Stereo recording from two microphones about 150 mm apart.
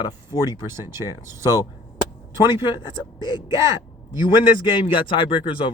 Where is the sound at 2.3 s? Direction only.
30° left (ahead or behind).